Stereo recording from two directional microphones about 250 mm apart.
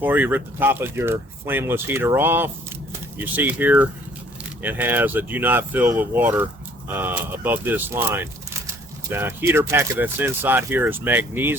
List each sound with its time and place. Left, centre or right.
0.0 s speech: centre